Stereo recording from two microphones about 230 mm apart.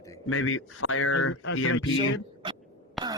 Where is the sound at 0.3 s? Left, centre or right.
Left.